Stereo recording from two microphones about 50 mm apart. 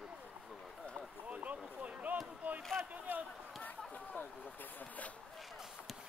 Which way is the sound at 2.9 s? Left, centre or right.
Right.